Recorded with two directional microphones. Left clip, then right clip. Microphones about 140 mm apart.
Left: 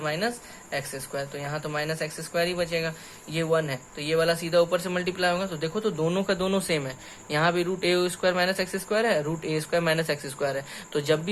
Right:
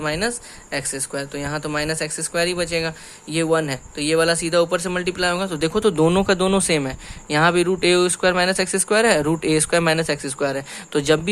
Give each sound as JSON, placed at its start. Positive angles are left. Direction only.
{"t": 0.0, "sound": "speech", "side_deg": -50}